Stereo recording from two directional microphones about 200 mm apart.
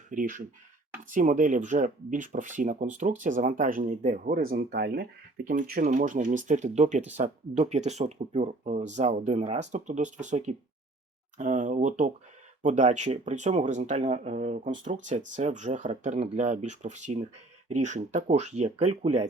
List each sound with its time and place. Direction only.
0.1 s speech: 40° right (ahead or behind)